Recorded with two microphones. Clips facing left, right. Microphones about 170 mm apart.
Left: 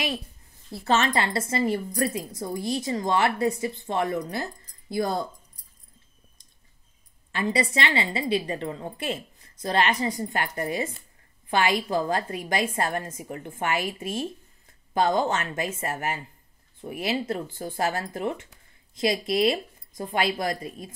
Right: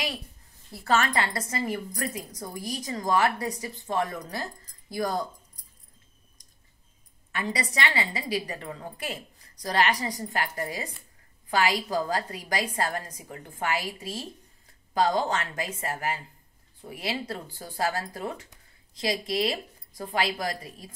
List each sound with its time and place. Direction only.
0.8 s speech: 25° left (ahead or behind)
7.3 s a woman's voice: 25° left (ahead or behind)